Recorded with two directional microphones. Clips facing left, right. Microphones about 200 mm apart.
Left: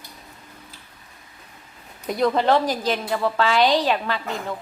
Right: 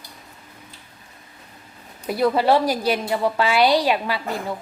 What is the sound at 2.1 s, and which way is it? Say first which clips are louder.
A woman's voice: right 1 dB; 10° right (ahead or behind).